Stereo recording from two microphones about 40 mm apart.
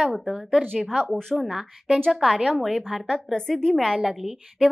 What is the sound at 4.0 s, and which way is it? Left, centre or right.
Speech, centre.